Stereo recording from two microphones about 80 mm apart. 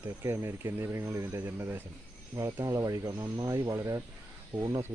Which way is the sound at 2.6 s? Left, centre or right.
Right.